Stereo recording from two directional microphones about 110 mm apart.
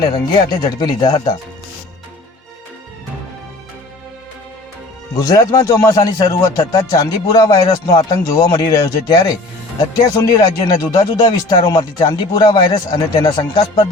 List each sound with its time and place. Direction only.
0.1 s a man's voice: 35° left (ahead or behind)
5.1 s a man's voice: 35° left (ahead or behind)